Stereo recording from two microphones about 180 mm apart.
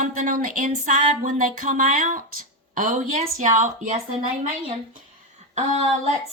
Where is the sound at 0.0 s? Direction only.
50° right (ahead or behind).